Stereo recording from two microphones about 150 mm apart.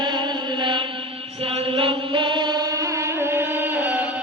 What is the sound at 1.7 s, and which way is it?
Chant, 35° right (ahead or behind).